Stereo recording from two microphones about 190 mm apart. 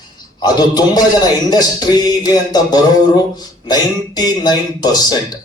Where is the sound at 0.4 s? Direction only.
20° left (ahead or behind).